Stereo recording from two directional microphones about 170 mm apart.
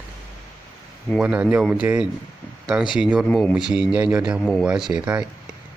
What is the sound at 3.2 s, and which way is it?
A man's voice, 5° left (ahead or behind).